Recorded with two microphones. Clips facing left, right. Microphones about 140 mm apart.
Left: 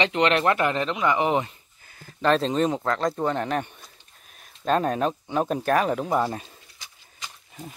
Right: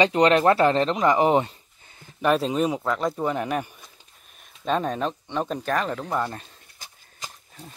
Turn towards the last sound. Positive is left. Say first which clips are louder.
# right 2 dB
turn(degrees=-45)  # may be behind; listen again after turning